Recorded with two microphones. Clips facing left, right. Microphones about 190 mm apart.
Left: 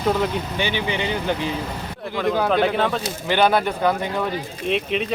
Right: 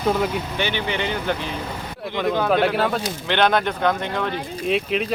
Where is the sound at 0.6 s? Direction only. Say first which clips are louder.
Left 1 dB; 15° left (ahead or behind).